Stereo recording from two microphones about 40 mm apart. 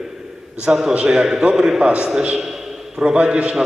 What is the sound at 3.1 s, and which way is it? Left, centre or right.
Speech, right.